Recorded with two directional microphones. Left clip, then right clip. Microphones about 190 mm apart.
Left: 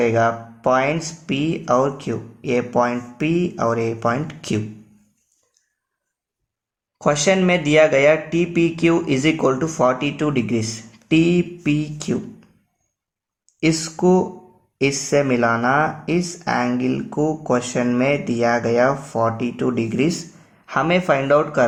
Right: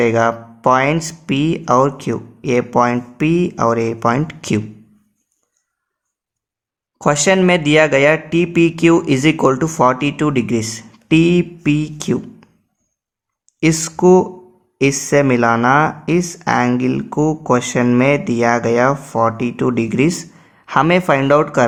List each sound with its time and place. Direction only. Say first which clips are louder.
0.0 s speech: right 3 dB; 45° right (ahead or behind)
7.0 s speech: right 4 dB; 40° right (ahead or behind)
13.6 s speech: right 4 dB; 35° right (ahead or behind)